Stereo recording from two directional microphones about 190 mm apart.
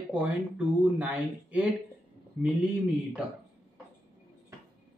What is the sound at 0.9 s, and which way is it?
Speech, 10° right (ahead or behind).